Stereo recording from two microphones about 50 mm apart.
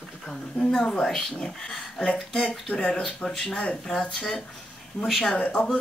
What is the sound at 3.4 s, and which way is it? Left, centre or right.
A woman's voice, centre.